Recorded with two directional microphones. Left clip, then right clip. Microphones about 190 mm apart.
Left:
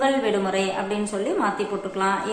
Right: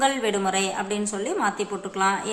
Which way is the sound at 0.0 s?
25° right (ahead or behind).